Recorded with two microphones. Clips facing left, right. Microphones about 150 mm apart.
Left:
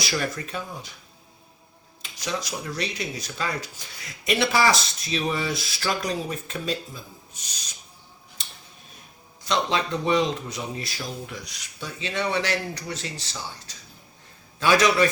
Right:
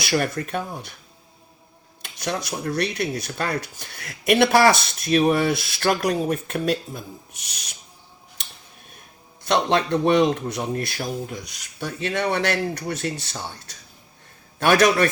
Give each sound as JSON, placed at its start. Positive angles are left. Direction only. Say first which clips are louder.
{"t": 0.0, "sound": "speech", "louder": "right 5 dB", "side_deg": -55}
{"t": 2.0, "sound": "speech", "louder": "right 3 dB", "side_deg": -60}
{"t": 9.4, "sound": "speech", "louder": "right 4 dB", "side_deg": -60}